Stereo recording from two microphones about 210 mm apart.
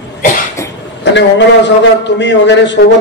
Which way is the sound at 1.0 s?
55° left (ahead or behind).